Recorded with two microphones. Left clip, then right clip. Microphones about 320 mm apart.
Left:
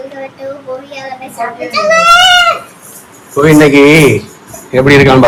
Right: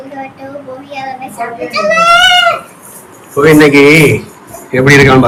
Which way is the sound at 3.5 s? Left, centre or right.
Left.